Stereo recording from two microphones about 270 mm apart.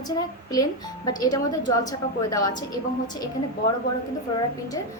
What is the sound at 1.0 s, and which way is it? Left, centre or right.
A woman's voice, centre.